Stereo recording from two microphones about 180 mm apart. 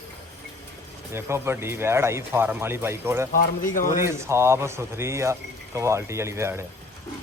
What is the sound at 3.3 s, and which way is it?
Speech, 50° left (ahead or behind).